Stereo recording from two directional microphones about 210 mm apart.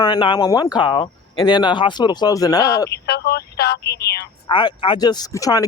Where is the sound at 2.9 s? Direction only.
50° left (ahead or behind).